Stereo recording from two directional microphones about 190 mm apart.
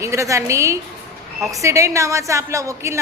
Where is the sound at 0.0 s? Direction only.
15° right (ahead or behind).